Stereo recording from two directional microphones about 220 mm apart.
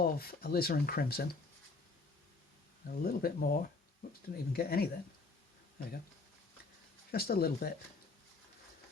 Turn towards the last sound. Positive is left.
turn(degrees=45)  # may be behind; listen again after turning